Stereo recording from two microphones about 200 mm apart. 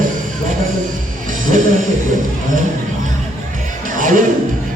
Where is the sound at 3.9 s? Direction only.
40° right (ahead or behind).